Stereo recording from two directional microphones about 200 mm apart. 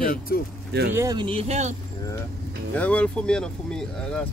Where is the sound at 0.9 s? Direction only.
20° right (ahead or behind).